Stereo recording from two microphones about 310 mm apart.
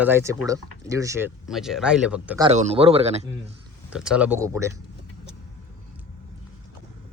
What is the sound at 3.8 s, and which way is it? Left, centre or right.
Speech, centre.